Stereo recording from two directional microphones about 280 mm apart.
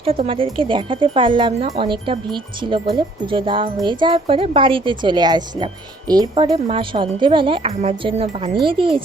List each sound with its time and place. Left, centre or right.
0.0 s speech: centre